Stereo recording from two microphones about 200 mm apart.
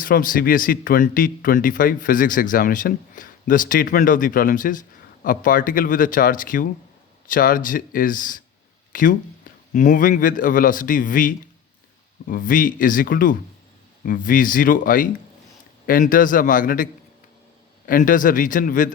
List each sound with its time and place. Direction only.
0.0 s speech: 45° left (ahead or behind)